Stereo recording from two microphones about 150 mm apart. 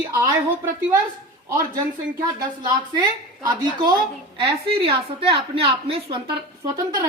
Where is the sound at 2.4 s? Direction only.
25° right (ahead or behind).